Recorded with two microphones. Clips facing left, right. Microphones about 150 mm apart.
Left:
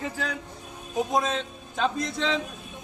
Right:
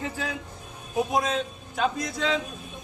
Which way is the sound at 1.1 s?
5° right (ahead or behind).